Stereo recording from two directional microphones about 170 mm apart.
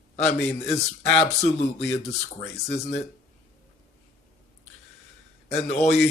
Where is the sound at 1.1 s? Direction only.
40° left (ahead or behind).